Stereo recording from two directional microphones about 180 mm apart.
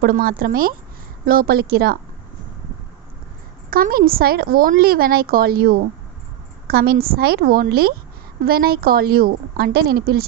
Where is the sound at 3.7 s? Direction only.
55° right (ahead or behind).